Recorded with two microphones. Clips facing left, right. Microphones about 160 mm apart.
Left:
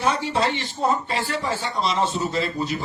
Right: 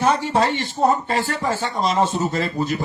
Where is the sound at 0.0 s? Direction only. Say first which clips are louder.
Right 4 dB; 45° right (ahead or behind).